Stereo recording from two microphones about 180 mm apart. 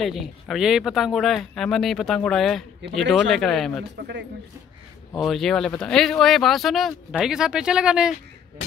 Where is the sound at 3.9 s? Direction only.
65° right (ahead or behind).